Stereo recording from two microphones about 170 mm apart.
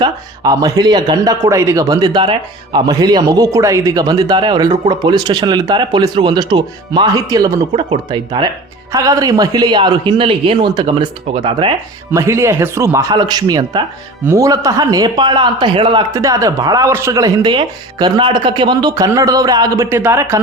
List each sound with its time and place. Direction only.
0.0 s speech: 20° right (ahead or behind)
12.1 s speech: 15° right (ahead or behind)